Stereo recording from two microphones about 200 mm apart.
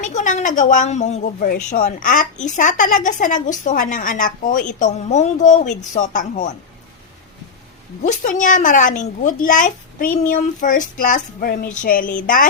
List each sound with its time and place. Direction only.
0.0 s a woman's voice: 40° left (ahead or behind)
8.0 s a woman's voice: 40° left (ahead or behind)